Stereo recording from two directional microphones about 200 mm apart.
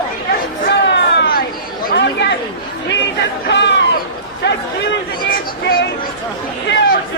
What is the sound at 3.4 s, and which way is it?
Chatter, 60° left (ahead or behind).